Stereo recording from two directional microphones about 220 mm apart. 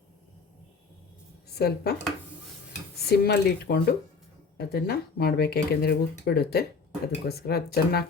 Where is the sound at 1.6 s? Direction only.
45° left (ahead or behind).